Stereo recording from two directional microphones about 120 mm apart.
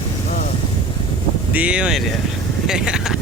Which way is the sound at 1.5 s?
10° right (ahead or behind).